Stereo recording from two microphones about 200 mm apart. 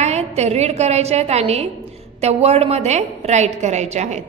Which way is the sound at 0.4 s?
30° right (ahead or behind).